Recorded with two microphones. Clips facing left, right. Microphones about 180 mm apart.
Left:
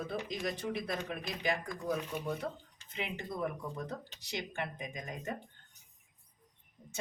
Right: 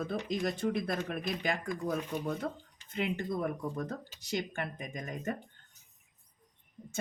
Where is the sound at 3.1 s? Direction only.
50° right (ahead or behind).